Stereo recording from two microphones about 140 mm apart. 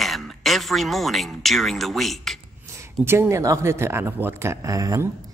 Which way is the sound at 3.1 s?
20° right (ahead or behind).